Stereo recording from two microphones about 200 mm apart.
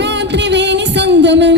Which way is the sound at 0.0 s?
60° right (ahead or behind).